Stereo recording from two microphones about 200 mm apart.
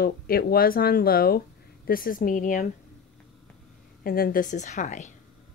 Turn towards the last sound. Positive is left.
turn(degrees=35)  # may be behind; listen again after turning